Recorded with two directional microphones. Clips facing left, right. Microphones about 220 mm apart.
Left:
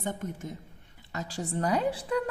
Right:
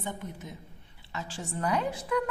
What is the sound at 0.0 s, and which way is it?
A woman's voice, 45° left (ahead or behind).